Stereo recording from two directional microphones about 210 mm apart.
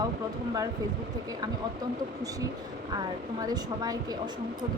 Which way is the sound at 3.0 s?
20° right (ahead or behind).